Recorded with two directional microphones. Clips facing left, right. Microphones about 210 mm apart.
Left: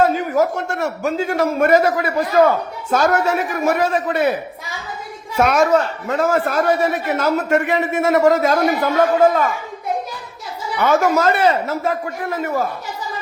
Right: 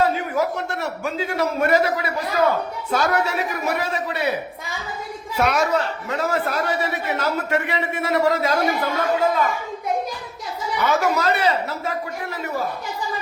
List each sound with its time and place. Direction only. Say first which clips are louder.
0.0 s a man's voice: left 5 dB; 45° left (ahead or behind)
5.4 s a man's voice: left 5 dB; 50° left (ahead or behind)
10.8 s a man's voice: left 5 dB; 50° left (ahead or behind)